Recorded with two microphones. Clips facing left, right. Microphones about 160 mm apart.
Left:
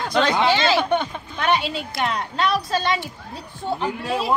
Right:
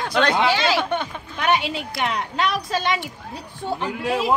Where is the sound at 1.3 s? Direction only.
15° right (ahead or behind).